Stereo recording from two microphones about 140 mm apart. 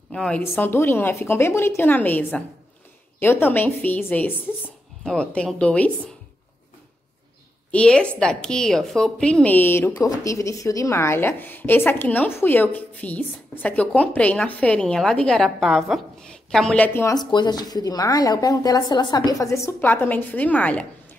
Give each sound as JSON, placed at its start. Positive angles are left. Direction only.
{"t": 0.1, "sound": "a woman's voice", "side_deg": 5}
{"t": 0.4, "sound": "a woman's voice", "side_deg": 15}
{"t": 7.7, "sound": "a woman's voice", "side_deg": 5}
{"t": 17.1, "sound": "speech", "side_deg": 30}